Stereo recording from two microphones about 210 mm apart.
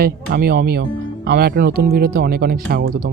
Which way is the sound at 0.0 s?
50° right (ahead or behind).